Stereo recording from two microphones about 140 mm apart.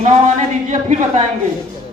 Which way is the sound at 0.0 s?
60° right (ahead or behind).